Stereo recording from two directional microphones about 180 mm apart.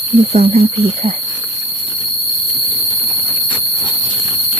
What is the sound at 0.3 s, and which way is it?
Speech, 35° right (ahead or behind).